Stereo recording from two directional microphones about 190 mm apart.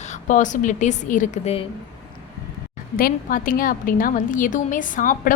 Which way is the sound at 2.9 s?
50° left (ahead or behind).